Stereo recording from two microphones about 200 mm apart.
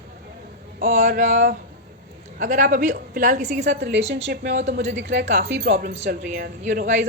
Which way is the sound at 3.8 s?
55° right (ahead or behind).